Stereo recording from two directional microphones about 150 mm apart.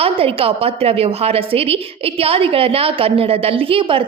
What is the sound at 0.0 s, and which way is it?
A woman's voice, 40° right (ahead or behind).